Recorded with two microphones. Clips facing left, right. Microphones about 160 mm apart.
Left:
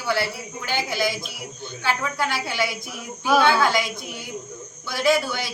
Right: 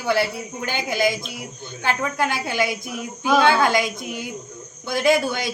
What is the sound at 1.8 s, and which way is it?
Speech, 50° right (ahead or behind).